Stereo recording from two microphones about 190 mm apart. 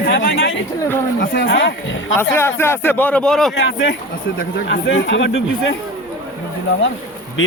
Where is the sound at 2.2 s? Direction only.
15° left (ahead or behind).